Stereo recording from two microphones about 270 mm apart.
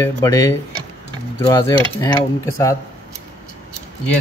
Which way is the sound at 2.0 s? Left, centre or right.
Centre.